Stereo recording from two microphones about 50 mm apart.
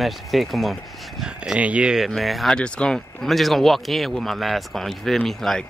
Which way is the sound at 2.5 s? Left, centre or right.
Centre.